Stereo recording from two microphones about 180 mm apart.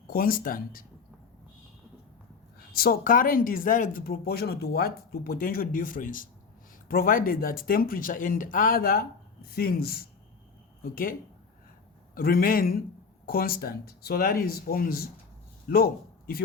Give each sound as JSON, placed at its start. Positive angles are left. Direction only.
{"t": 0.1, "sound": "speech", "side_deg": 55}
{"t": 2.7, "sound": "a man's voice", "side_deg": 55}